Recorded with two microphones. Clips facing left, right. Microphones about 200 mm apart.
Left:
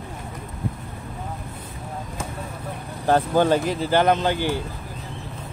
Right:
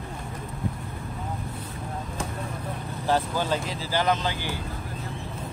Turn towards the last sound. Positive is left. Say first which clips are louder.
# left 6 dB
turn(degrees=55)  # may be behind; listen again after turning